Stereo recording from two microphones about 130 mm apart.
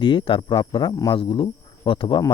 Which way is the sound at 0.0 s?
40° left (ahead or behind).